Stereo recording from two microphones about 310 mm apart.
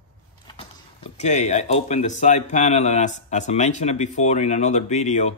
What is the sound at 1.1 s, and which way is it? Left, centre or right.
Speech, left.